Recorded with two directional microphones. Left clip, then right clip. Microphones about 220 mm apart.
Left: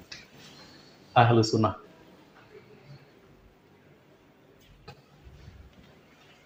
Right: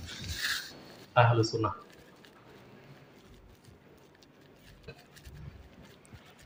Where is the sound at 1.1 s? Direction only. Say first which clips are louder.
Left 4 dB; 35° left (ahead or behind).